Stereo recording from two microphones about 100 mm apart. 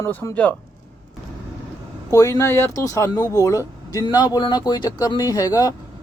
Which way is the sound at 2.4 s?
25° left (ahead or behind).